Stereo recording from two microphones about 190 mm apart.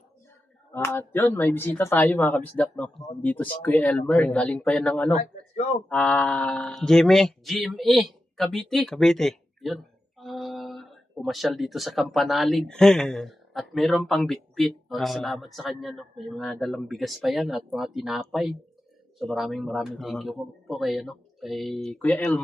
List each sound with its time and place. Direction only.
0.7 s speech: 10° left (ahead or behind)
5.1 s speech: 35° left (ahead or behind)
5.9 s speech: 5° left (ahead or behind)